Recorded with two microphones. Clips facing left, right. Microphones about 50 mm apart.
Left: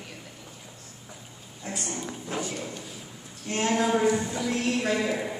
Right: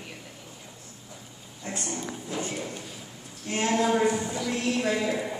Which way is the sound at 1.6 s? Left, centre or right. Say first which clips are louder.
Even; centre.